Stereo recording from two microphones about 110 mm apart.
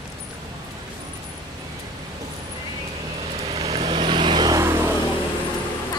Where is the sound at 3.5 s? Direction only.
60° right (ahead or behind); by 4.6 s 40° right (ahead or behind).